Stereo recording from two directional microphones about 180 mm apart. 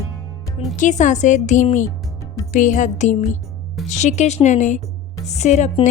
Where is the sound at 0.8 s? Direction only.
45° left (ahead or behind).